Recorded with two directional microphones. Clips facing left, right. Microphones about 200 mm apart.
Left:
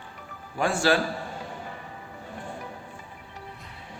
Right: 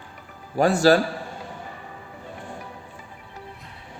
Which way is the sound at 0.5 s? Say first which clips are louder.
Right 6 dB; 40° right (ahead or behind).